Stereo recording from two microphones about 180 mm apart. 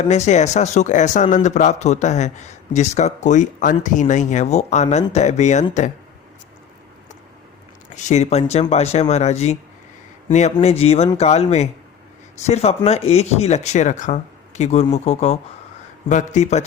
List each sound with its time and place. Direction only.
0.0 s speech: 40° left (ahead or behind)
7.9 s speech: 40° left (ahead or behind)